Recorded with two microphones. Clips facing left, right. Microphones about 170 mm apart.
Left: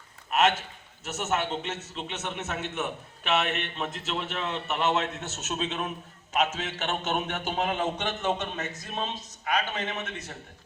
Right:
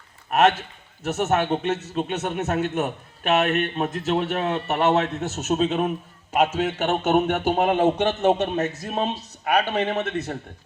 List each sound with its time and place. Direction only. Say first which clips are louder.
0.3 s a man's voice: right 6 dB; 55° right (ahead or behind)